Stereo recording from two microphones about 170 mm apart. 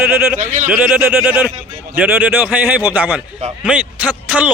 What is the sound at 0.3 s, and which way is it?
Speech, 50° right (ahead or behind).